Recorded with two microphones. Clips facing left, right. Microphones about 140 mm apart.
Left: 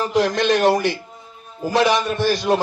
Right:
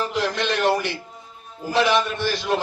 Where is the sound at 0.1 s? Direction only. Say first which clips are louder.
Left 6 dB; 45° left (ahead or behind).